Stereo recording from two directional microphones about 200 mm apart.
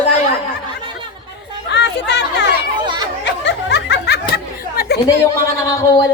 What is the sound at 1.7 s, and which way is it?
Chatter, 60° left (ahead or behind).